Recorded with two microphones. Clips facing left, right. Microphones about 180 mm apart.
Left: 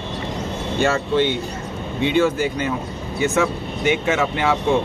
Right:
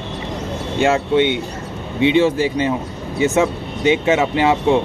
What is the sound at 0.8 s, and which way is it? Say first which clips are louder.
Speech: right 4 dB; 20° right (ahead or behind).